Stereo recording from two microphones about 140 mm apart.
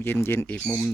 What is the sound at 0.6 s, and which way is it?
Speech, 10° right (ahead or behind).